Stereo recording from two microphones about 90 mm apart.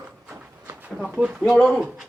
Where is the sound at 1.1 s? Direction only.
15° right (ahead or behind).